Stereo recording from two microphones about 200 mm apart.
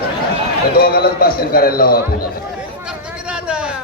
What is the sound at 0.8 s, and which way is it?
A man's voice, 50° left (ahead or behind).